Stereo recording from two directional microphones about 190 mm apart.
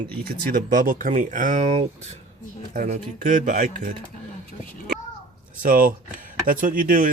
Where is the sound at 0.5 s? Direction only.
45° right (ahead or behind).